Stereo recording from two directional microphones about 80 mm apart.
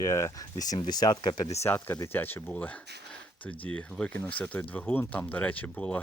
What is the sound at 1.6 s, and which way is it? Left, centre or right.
Speech, left.